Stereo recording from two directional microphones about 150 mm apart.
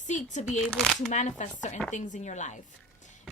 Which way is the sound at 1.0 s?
50° left (ahead or behind).